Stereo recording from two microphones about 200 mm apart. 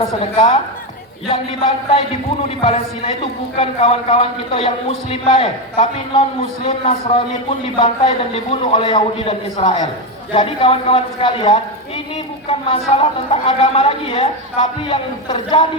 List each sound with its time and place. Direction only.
0.2 s a man's voice: 25° left (ahead or behind)